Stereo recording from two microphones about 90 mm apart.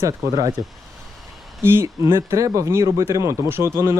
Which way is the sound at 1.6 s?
25° right (ahead or behind).